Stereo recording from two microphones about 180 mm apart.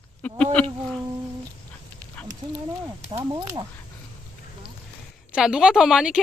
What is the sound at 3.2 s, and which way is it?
Speech, 25° right (ahead or behind).